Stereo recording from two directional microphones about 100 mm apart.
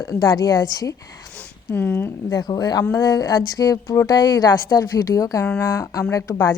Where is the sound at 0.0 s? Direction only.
40° left (ahead or behind).